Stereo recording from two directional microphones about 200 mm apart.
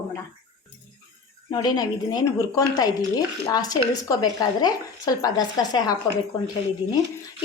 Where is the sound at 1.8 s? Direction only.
20° left (ahead or behind).